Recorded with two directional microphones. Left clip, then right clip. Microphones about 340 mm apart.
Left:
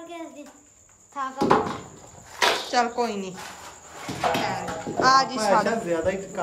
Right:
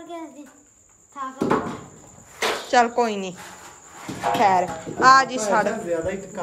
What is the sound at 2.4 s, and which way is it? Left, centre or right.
Speech, centre.